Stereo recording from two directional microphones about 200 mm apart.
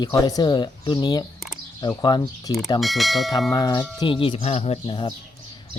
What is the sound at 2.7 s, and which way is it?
Speech, centre (ahead or behind).